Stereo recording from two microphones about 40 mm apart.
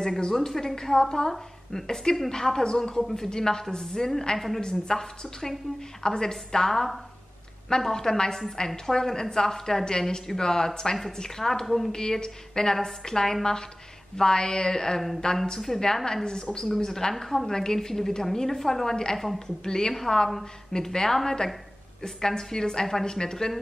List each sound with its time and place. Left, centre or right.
0.2 s a woman's voice: centre
11.9 s a woman's voice: centre
19.4 s a woman's voice: centre